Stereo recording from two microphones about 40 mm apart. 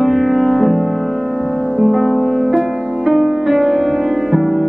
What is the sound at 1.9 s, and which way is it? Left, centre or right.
Music, centre.